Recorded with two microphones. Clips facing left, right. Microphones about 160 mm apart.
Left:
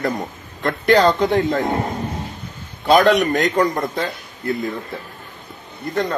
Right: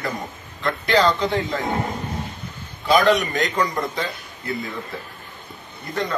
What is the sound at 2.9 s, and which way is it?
Speech, centre (ahead or behind).